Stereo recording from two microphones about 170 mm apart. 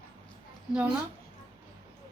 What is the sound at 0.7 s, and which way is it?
Speech, 10° right (ahead or behind).